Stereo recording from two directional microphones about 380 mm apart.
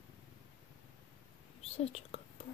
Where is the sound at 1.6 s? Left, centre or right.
Centre.